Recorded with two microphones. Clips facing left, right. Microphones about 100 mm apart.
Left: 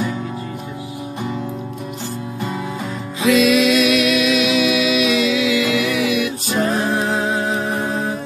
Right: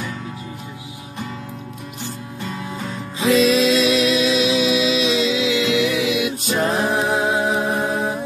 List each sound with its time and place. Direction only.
3.3 s music: 30° right (ahead or behind); by 8.1 s 15° right (ahead or behind)